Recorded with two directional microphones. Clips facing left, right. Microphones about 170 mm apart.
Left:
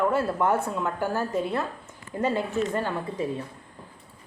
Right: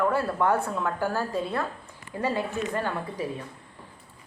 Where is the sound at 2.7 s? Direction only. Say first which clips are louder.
Left 1 dB; 25° left (ahead or behind).